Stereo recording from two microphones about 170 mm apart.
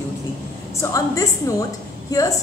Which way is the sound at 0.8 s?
20° left (ahead or behind).